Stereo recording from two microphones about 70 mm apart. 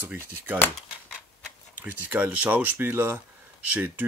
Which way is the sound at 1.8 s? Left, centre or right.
Right.